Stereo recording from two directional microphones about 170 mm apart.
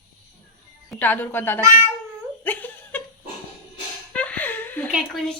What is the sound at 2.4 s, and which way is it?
Giggle, 10° left (ahead or behind).